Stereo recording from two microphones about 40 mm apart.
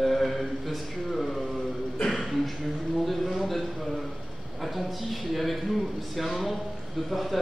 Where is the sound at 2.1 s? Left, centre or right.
Centre.